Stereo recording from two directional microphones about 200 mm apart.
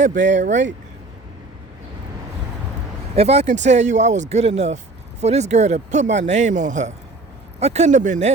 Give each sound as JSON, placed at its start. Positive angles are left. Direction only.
{"t": 0.0, "sound": "speech", "side_deg": -40}
{"t": 3.2, "sound": "speech", "side_deg": -30}